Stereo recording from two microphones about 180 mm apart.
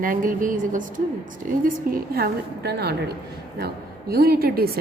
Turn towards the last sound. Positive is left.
turn(degrees=-55)  # may be behind; listen again after turning